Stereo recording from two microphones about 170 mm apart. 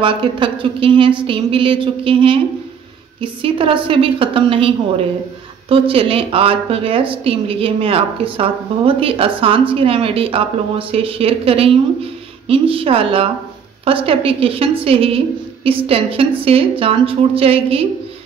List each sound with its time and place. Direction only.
0.0 s a woman's voice: 30° right (ahead or behind)